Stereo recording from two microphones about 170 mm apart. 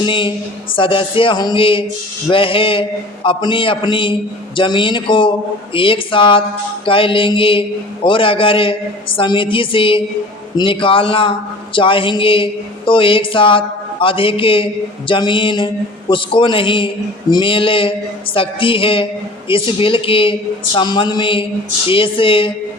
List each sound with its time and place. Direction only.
0.0 s a man's voice: 30° left (ahead or behind)